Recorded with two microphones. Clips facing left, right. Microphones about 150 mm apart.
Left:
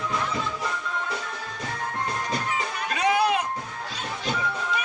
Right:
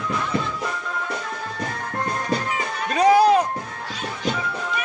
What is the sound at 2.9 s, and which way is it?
Music, 40° right (ahead or behind).